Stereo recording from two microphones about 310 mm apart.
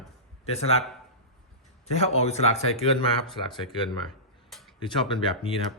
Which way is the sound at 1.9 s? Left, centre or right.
Centre.